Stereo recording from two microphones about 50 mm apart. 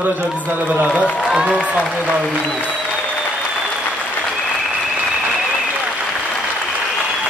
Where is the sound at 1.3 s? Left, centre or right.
Centre.